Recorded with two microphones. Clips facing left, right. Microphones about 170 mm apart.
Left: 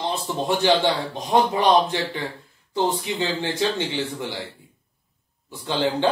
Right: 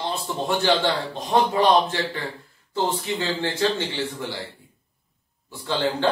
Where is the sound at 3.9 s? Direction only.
20° left (ahead or behind).